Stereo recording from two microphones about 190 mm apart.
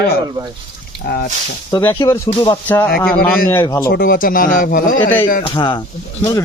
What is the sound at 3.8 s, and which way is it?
A man's voice, 50° left (ahead or behind).